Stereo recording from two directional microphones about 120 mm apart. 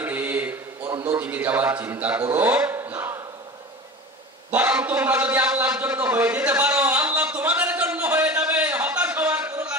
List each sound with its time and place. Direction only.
0.0 s mantra: 15° right (ahead or behind)
1.0 s a man's voice: 15° right (ahead or behind)
4.5 s a sound: 15° right (ahead or behind)